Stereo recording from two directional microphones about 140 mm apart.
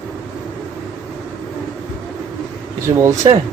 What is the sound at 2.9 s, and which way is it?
Speech, 40° right (ahead or behind).